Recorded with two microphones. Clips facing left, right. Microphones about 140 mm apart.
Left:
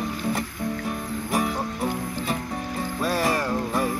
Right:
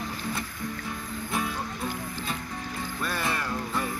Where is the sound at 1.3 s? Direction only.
75° left (ahead or behind).